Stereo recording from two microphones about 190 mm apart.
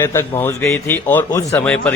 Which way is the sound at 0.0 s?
10° left (ahead or behind).